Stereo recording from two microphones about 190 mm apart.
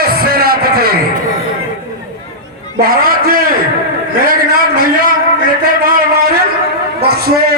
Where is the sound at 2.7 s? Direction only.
50° right (ahead or behind).